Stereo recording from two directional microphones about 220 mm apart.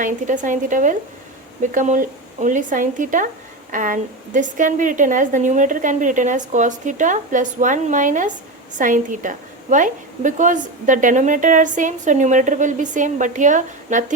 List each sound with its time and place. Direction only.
0.0 s a woman's voice: 35° right (ahead or behind)